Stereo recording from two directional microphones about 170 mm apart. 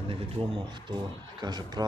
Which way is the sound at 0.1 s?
30° right (ahead or behind).